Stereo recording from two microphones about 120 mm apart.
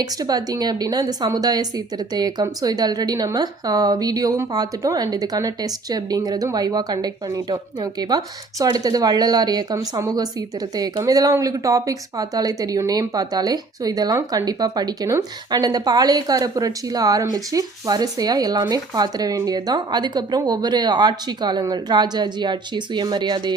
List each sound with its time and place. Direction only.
0.0 s a woman's voice: 30° right (ahead or behind)